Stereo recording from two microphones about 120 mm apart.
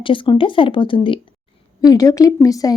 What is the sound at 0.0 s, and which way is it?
Speech, 45° left (ahead or behind).